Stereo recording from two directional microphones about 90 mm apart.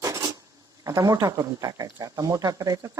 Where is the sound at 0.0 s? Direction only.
40° right (ahead or behind).